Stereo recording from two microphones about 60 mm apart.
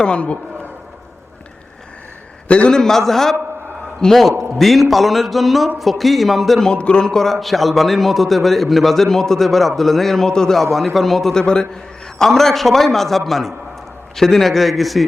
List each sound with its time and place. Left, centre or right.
0.0 s a man's voice: centre
2.5 s a man's voice: centre
6.7 s a man's voice: centre